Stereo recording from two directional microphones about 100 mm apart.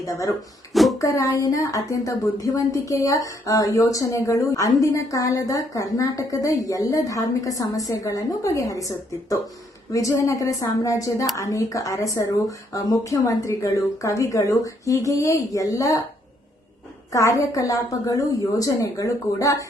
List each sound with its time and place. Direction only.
0.0 s a woman's voice: 35° left (ahead or behind)
0.7 s a sound: centre (ahead or behind)
0.9 s a woman's voice: 35° left (ahead or behind)
9.9 s a woman's voice: 35° left (ahead or behind)
17.1 s a woman's voice: 35° left (ahead or behind)